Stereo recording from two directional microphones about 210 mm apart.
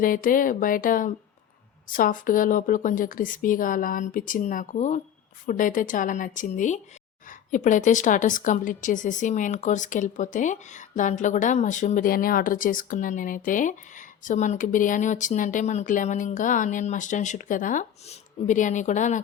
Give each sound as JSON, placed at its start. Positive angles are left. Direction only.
{"t": 0.0, "sound": "a woman's voice", "side_deg": 40}